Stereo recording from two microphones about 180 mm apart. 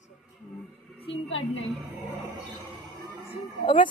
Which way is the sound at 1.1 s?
90° left.